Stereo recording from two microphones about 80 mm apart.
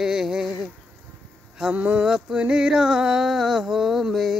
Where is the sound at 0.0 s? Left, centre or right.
Centre.